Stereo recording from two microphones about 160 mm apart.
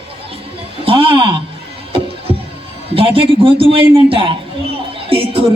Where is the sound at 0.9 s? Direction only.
35° right (ahead or behind).